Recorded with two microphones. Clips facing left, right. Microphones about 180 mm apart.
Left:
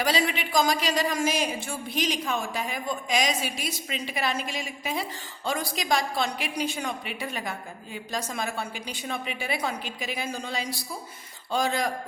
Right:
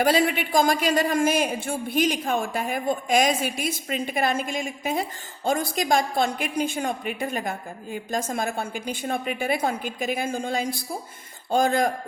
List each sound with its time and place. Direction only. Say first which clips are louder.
0.0 s speech: right 5 dB; 55° right (ahead or behind)